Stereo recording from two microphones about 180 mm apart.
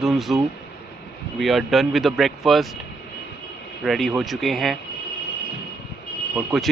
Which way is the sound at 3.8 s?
Centre (ahead or behind).